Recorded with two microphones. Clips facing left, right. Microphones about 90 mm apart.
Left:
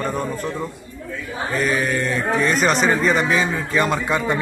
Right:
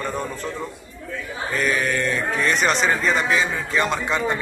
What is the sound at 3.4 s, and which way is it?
Speech, 35° left (ahead or behind).